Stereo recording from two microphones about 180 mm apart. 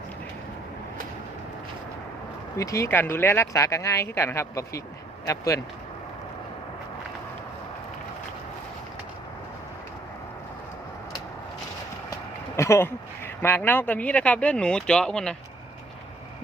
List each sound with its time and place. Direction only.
2.6 s speech: 15° left (ahead or behind)
12.5 s speech: 15° left (ahead or behind)